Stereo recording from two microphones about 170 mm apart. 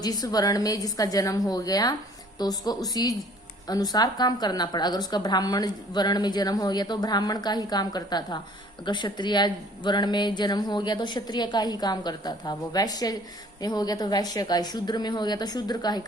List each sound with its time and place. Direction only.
0.0 s a woman's voice: 20° left (ahead or behind)